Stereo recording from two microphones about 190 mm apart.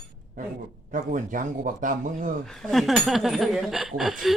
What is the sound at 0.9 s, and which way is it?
A man's voice, 45° right (ahead or behind).